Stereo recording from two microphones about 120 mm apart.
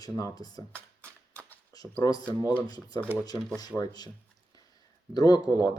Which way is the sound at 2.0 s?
30° left (ahead or behind).